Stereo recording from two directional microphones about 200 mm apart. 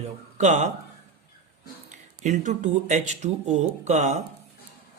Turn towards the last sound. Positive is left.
turn(degrees=-35)  # may be behind; listen again after turning